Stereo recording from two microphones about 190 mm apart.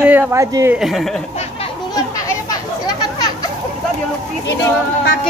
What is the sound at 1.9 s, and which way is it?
Chatter, 20° left (ahead or behind).